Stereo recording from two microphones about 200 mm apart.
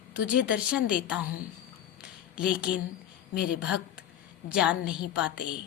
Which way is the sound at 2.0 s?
5° right (ahead or behind).